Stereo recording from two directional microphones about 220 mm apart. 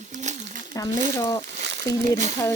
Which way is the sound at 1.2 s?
15° left (ahead or behind).